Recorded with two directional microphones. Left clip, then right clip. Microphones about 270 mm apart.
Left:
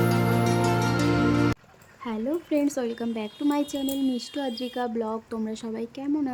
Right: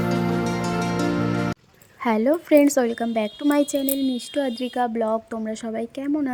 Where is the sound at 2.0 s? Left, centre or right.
Right.